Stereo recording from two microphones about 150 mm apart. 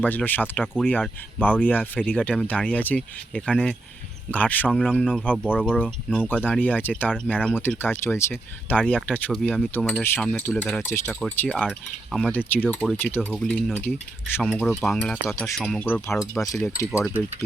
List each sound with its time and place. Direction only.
0.0 s speech: 10° left (ahead or behind)
16.2 s speech: 20° left (ahead or behind)